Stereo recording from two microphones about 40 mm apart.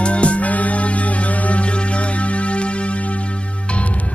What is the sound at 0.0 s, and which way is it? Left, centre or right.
Music, left.